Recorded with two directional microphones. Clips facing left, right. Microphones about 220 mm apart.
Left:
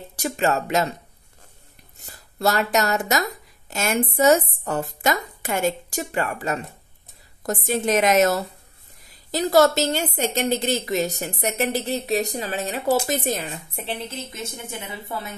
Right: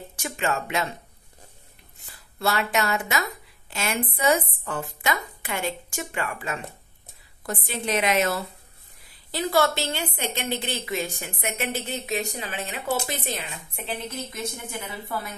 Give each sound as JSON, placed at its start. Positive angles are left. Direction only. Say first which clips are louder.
{"t": 0.1, "sound": "a woman's voice", "louder": "left 6 dB", "side_deg": 40}
{"t": 2.0, "sound": "a woman's voice", "louder": "left 4 dB", "side_deg": 40}
{"t": 14.1, "sound": "a woman's voice", "louder": "even", "side_deg": 25}